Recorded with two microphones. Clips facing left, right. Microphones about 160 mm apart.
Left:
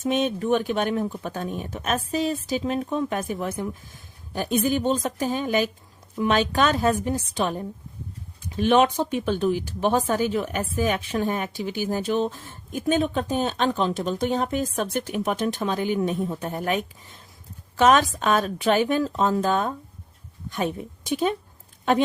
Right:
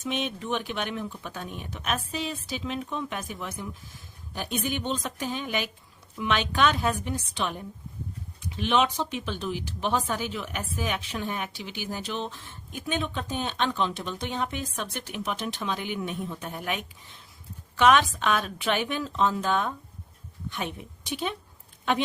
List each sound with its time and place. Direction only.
0.0 s speech: 45° left (ahead or behind)